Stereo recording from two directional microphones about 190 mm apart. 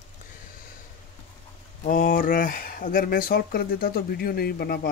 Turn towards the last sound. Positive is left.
turn(degrees=55)  # may be behind; listen again after turning